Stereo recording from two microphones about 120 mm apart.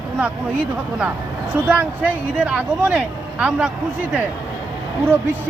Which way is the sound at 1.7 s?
10° right (ahead or behind).